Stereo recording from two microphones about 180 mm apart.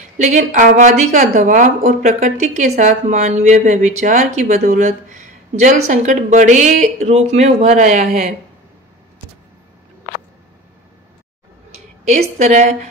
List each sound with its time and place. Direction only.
0.2 s speech: 45° right (ahead or behind)
12.0 s speech: 40° right (ahead or behind)